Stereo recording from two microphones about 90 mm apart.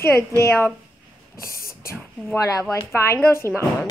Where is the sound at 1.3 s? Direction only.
35° left (ahead or behind).